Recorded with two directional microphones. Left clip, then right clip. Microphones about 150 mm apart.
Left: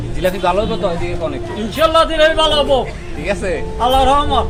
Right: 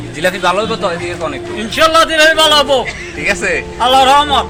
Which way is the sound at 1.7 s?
20° left (ahead or behind).